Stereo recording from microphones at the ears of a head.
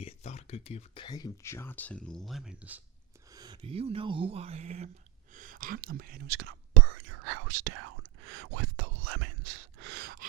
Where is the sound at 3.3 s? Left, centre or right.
Right.